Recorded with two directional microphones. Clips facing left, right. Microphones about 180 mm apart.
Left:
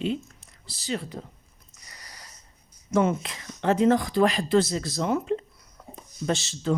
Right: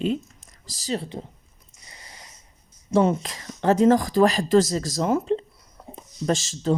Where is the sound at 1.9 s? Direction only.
25° right (ahead or behind).